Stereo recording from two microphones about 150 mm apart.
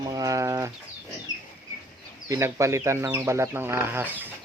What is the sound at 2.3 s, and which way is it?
Speech, 20° right (ahead or behind).